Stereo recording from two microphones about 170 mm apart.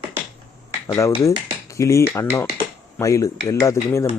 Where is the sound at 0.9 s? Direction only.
20° left (ahead or behind).